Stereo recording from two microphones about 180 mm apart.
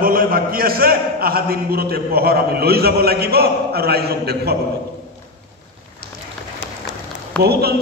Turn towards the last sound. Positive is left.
turn(degrees=-60)  # may be behind; listen again after turning